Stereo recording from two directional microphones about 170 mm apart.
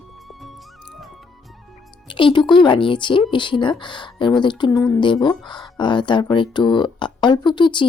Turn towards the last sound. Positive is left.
turn(degrees=30)  # may be behind; listen again after turning